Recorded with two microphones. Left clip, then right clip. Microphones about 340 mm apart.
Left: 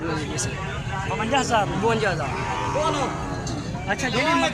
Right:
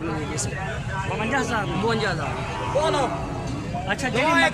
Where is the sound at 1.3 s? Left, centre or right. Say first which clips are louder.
Left 5 dB; centre.